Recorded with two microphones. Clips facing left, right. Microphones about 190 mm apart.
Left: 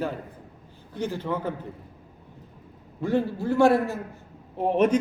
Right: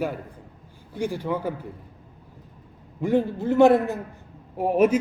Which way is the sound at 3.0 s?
15° right (ahead or behind).